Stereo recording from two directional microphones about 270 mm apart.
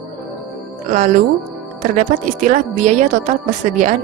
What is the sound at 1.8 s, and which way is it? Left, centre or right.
A woman's voice, right.